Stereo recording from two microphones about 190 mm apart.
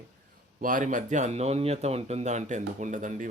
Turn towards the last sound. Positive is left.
turn(degrees=-40)  # may be behind; listen again after turning